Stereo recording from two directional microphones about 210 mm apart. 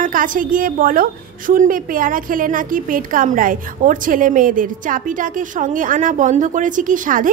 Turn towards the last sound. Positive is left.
turn(degrees=-40)  # may be behind; listen again after turning